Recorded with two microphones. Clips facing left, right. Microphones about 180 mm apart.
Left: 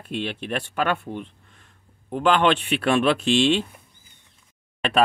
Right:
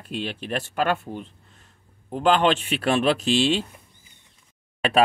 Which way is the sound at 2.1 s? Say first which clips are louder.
Even; 40° right (ahead or behind).